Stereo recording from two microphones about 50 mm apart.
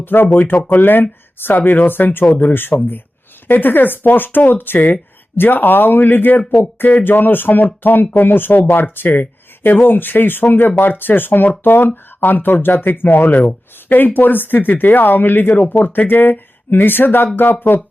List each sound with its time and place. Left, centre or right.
0.0 s speech: left